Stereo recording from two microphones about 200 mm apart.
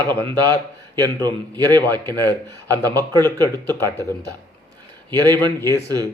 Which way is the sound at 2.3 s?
10° left (ahead or behind).